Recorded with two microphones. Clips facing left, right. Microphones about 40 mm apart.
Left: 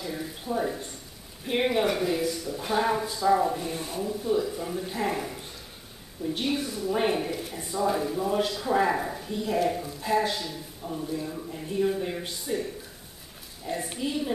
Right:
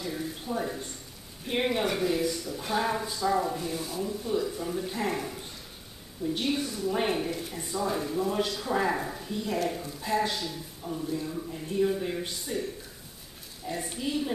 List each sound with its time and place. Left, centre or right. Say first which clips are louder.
0.0 s a sound: even; centre
1.4 s speech: left 3 dB; centre
3.7 s speech: left 1 dB; left
4.0 s speech: left 4 dB; centre
13.9 s speech: even; centre